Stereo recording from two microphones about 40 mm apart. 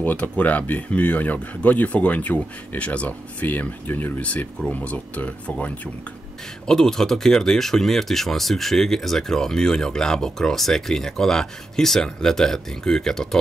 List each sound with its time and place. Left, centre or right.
0.4 s speech: left
3.9 s speech: left
4.2 s speech: left
6.7 s speech: centre